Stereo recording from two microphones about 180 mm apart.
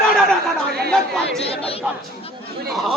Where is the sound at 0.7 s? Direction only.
60° right (ahead or behind).